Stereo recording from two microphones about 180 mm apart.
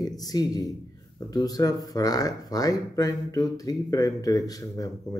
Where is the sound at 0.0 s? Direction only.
20° left (ahead or behind).